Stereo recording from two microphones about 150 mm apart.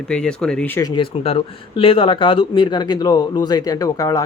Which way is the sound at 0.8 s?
30° left (ahead or behind).